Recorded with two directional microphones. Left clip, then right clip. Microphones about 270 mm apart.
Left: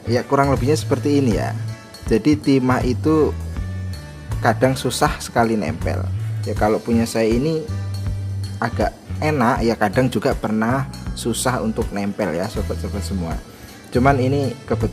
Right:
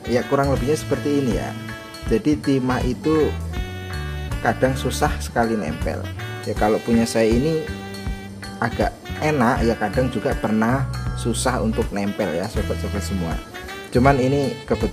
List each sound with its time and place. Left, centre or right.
0.1 s speech: centre
4.4 s speech: centre
10.3 s speech: centre